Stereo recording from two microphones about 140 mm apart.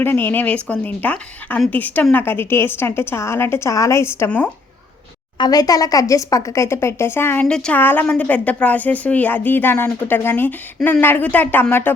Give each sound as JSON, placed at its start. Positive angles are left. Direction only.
{"t": 0.0, "sound": "speech", "side_deg": 15}
{"t": 5.4, "sound": "speech", "side_deg": 25}